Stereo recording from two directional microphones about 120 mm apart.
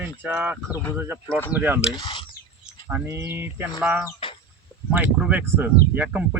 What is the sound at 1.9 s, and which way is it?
Speech, 40° left (ahead or behind).